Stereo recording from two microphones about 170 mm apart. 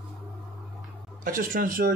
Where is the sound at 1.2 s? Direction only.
55° right (ahead or behind).